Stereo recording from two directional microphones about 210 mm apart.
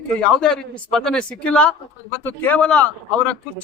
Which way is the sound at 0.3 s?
5° left (ahead or behind).